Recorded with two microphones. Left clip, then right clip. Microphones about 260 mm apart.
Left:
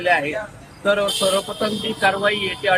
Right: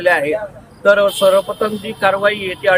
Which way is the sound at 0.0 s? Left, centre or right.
Centre.